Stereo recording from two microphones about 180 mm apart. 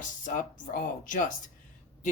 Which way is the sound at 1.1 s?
45° left (ahead or behind).